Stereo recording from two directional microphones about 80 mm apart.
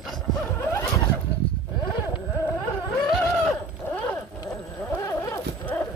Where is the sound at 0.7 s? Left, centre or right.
Left.